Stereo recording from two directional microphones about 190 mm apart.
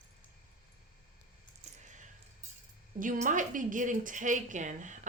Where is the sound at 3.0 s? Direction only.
45° right (ahead or behind).